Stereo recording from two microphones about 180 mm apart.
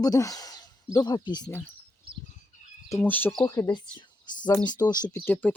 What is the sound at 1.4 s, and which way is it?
Speech, 10° left (ahead or behind).